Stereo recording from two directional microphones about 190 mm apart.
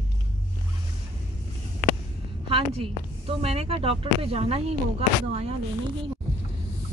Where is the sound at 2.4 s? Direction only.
30° right (ahead or behind).